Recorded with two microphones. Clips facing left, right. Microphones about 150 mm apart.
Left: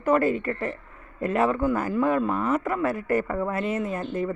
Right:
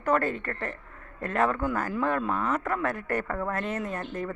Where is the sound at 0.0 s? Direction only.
5° left (ahead or behind).